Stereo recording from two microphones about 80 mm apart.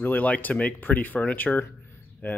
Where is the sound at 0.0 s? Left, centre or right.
Centre.